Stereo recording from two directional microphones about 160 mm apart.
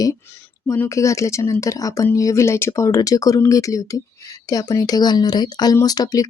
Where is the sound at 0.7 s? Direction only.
20° left (ahead or behind).